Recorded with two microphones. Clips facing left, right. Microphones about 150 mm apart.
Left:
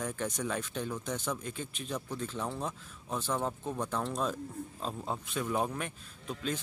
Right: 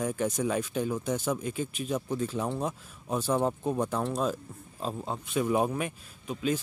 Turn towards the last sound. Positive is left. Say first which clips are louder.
# right 6 dB
turn(degrees=-10)  # may be behind; listen again after turning